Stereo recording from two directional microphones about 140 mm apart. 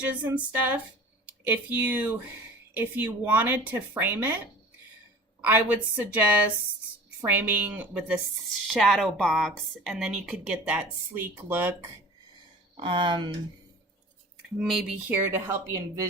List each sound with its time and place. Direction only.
0.1 s speech: 10° right (ahead or behind)
5.4 s speech: 15° right (ahead or behind)
8.6 s speech: centre (ahead or behind)
12.7 s speech: 40° right (ahead or behind)
14.6 s speech: centre (ahead or behind)
15.3 s speech: 20° right (ahead or behind)